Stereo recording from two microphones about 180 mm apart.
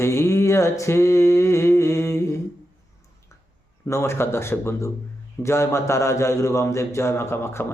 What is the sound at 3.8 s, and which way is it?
Speech, 15° left (ahead or behind).